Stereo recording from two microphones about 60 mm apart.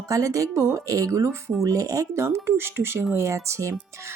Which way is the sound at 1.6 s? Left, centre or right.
Right.